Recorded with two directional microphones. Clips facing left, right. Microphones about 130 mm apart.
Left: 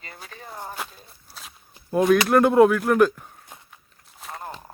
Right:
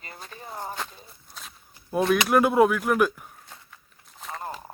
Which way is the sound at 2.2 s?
5° right (ahead or behind).